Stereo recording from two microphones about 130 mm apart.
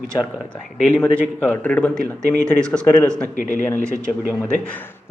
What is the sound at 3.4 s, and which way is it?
Speech, 80° left.